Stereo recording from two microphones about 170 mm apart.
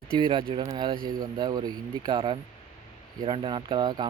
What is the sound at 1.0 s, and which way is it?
Speech, 55° right (ahead or behind).